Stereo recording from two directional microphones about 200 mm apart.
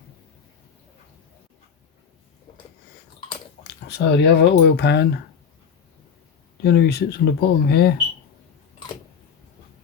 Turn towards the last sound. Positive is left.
turn(degrees=55)  # may be behind; listen again after turning